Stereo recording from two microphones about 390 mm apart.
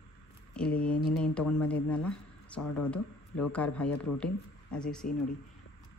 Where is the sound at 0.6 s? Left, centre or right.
Centre.